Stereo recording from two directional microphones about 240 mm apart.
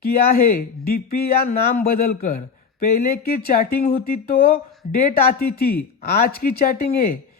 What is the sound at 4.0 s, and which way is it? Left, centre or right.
Speech, left.